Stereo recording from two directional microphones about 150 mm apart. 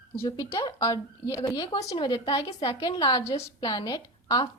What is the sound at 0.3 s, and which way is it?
A woman's voice, 25° left (ahead or behind).